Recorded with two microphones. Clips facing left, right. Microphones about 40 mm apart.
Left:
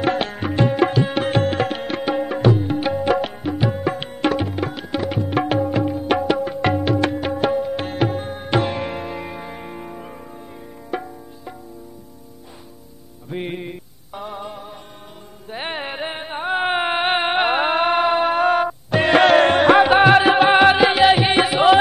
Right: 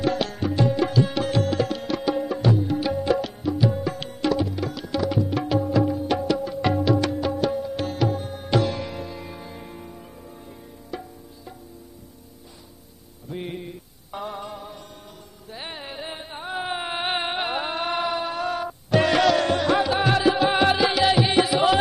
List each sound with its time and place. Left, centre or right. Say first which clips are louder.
0.0 s tabla: left 3 dB; left
6.0 s music: left 4 dB; left
13.3 s music: left 5 dB; left
14.1 s music: left 2 dB; centre
15.5 s carnatic music: left 8 dB; left
18.9 s music: even; left
19.1 s music: left 7 dB; left